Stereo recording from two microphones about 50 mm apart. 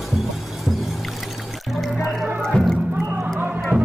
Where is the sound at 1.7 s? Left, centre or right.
Centre.